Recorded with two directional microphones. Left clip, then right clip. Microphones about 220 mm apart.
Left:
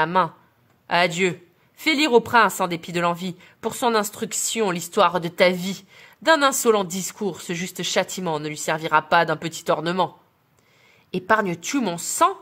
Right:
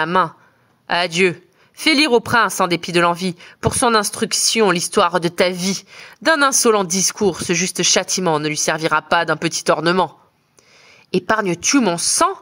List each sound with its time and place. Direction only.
0.0 s a woman's voice: 30° right (ahead or behind)